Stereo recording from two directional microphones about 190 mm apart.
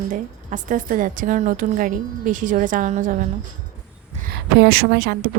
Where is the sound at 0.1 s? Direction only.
45° right (ahead or behind).